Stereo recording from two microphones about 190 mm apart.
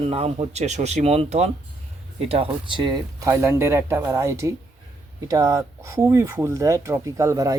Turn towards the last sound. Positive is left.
turn(degrees=-15)  # may be behind; listen again after turning